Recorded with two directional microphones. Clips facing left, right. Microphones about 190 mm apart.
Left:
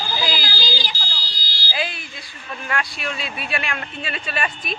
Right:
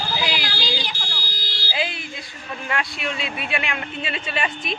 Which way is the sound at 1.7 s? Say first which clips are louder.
Even; 25° right (ahead or behind).